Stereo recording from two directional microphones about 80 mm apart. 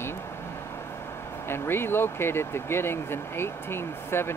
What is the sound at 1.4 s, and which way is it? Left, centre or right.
Speech, left.